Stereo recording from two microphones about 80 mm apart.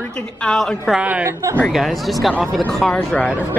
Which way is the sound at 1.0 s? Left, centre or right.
Centre.